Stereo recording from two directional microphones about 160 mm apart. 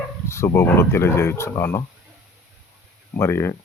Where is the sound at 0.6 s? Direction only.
15° left (ahead or behind).